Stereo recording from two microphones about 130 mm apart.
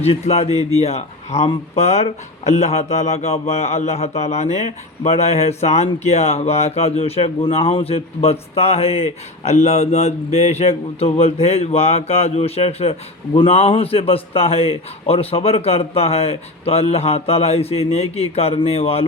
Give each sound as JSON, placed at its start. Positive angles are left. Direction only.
{"t": 0.0, "sound": "a man's voice", "side_deg": 55}